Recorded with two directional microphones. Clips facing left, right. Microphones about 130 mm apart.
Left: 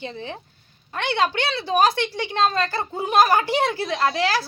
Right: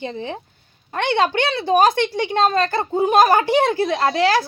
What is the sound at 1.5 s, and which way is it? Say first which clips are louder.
A woman's voice: right 5 dB; 50° right (ahead or behind).